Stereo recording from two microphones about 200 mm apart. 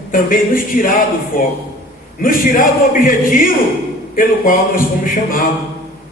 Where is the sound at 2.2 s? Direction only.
45° left (ahead or behind).